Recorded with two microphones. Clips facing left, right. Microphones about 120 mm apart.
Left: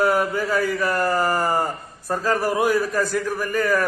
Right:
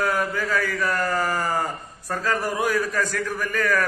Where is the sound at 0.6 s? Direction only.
15° left (ahead or behind).